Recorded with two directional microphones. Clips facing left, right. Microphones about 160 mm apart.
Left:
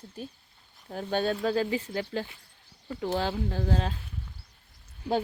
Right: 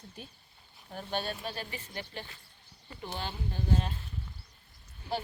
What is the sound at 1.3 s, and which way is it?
Speech, 90° left.